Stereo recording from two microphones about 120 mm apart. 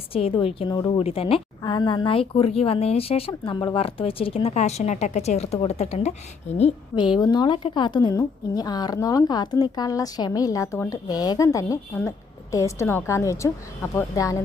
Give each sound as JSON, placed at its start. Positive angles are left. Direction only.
{"t": 0.1, "sound": "a woman's voice", "side_deg": 50}
{"t": 0.7, "sound": "a woman's voice", "side_deg": 35}
{"t": 0.9, "sound": "a woman's voice", "side_deg": 55}
{"t": 6.9, "sound": "a woman's voice", "side_deg": 40}